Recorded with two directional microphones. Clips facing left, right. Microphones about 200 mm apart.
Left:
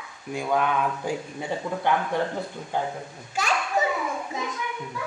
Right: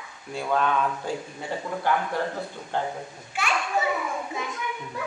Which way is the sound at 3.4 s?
40° left (ahead or behind).